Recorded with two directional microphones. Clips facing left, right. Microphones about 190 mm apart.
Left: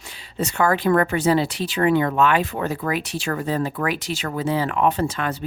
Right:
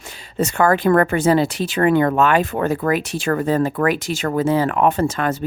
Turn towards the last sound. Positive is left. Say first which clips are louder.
# right 4 dB
turn(degrees=-45)  # may be behind; listen again after turning